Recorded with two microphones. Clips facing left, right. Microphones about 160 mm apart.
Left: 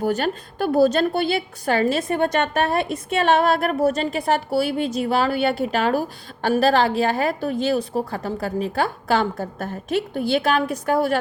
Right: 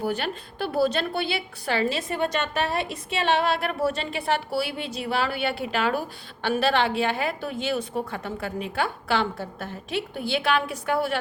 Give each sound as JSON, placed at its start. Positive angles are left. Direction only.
{"t": 0.0, "sound": "a woman's voice", "side_deg": 45}